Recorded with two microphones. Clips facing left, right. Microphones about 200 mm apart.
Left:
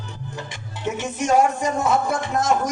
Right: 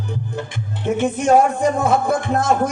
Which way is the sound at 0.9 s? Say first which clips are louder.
Right 6 dB; 55° right (ahead or behind).